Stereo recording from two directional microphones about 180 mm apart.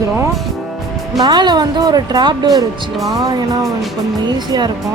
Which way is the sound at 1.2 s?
25° right (ahead or behind).